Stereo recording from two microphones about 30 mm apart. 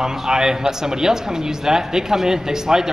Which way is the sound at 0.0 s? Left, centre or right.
Right.